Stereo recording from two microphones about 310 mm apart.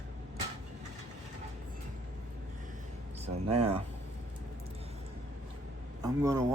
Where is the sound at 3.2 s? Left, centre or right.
Centre.